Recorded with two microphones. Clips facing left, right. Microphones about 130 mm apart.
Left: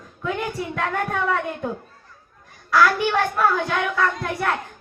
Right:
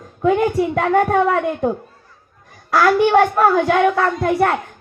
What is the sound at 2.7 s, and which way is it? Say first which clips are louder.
Speech: right 6 dB; 45° right (ahead or behind).